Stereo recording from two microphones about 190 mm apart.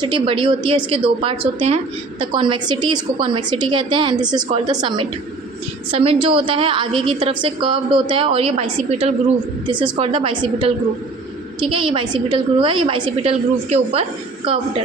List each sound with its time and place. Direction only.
0.0 s a woman's voice: 25° right (ahead or behind)